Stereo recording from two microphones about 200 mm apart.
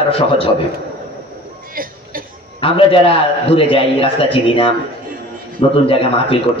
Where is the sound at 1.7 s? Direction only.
45° right (ahead or behind).